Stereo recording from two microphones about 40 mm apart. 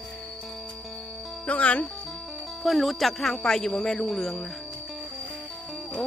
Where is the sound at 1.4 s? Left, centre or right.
Left.